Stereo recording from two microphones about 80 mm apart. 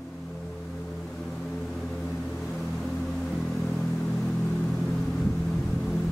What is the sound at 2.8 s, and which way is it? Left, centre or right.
Music, centre.